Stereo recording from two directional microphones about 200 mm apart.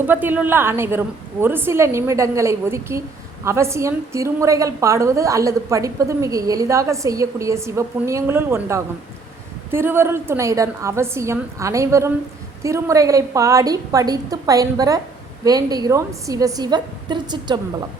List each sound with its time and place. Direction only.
0.0 s a woman's voice: 10° right (ahead or behind)